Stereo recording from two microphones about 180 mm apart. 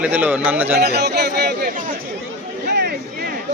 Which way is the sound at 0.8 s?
65° right (ahead or behind).